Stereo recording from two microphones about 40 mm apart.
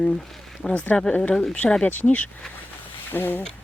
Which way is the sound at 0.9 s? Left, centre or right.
Left.